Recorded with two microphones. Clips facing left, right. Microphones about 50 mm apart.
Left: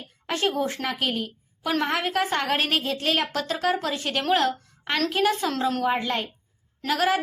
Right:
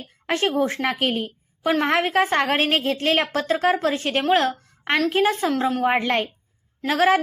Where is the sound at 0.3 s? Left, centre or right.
Right.